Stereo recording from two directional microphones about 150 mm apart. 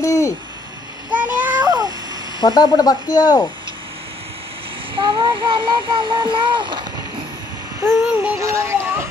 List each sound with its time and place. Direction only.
0.0 s owl: 20° left (ahead or behind)
1.1 s a sound: 10° right (ahead or behind)
1.6 s cat: 25° right (ahead or behind)
2.4 s speech: 25° left (ahead or behind)
4.9 s speech: 35° right (ahead or behind)
7.8 s synthetic singing: 20° right (ahead or behind)